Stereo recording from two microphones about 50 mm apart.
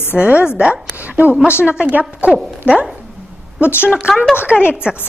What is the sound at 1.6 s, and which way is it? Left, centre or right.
A woman's voice, right.